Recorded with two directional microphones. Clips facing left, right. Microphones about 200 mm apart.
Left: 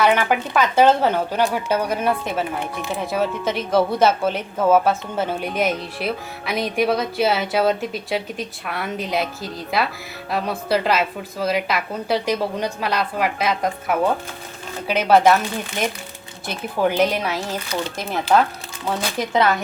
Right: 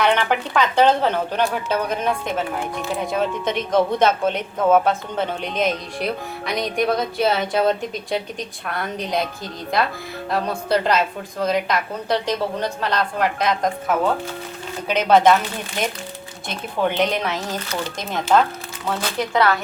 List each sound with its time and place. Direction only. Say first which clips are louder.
0.0 s a woman's voice: left 1 dB; 5° left (ahead or behind)
16.8 s a woman's voice: left 2 dB; 5° left (ahead or behind)
18.9 s speech: even; 20° left (ahead or behind)